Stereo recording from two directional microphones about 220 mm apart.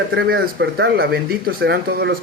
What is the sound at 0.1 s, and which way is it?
Speech, 50° right (ahead or behind).